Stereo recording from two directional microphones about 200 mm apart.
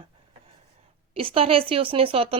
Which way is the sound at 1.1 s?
25° right (ahead or behind).